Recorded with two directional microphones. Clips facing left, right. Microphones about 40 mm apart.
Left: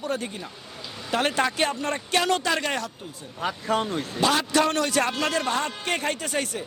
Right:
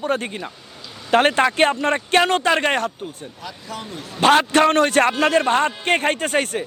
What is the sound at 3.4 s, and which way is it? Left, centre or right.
Speech, left.